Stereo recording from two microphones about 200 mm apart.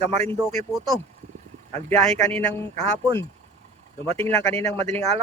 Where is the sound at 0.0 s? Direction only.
35° right (ahead or behind).